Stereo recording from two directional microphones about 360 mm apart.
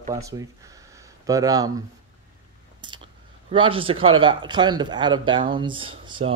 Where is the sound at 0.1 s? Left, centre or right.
Centre.